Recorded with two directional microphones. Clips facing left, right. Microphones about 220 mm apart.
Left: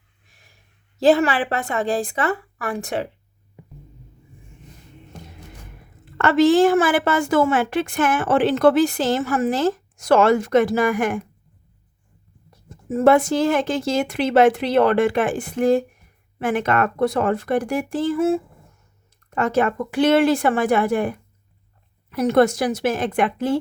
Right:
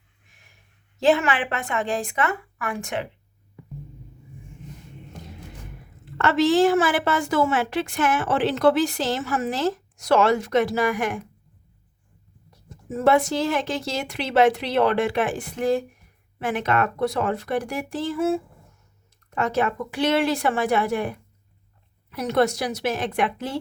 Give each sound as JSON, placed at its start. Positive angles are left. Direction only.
{"t": 0.9, "sound": "a woman's voice", "side_deg": 35}
{"t": 6.1, "sound": "a woman's voice", "side_deg": 50}
{"t": 12.6, "sound": "a woman's voice", "side_deg": 50}
{"t": 22.1, "sound": "a woman's voice", "side_deg": 50}